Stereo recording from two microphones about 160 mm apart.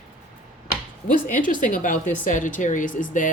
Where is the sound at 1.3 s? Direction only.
55° left (ahead or behind).